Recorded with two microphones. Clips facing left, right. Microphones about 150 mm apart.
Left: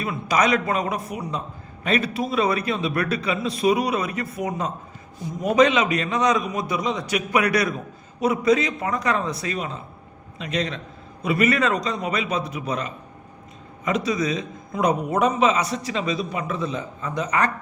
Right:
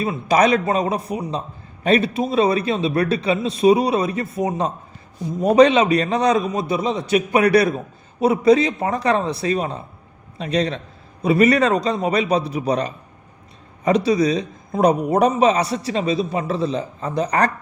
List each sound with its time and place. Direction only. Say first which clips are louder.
0.0 s a man's voice: right 5 dB; 30° right (ahead or behind)